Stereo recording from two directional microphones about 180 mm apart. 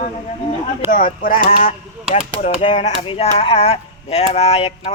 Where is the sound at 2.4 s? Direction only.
40° left (ahead or behind).